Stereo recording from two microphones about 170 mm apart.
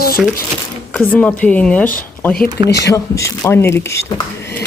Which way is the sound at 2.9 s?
15° left (ahead or behind).